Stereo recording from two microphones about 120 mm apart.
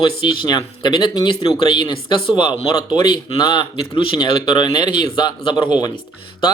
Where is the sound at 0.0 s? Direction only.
35° left (ahead or behind).